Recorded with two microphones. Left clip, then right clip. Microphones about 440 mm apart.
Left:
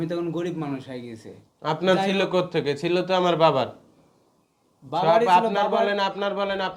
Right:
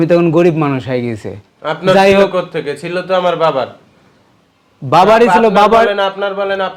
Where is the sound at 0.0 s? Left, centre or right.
Right.